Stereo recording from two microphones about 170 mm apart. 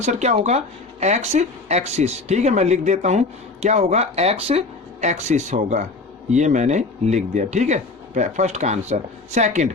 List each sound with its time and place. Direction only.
0.0 s speech: 45° right (ahead or behind)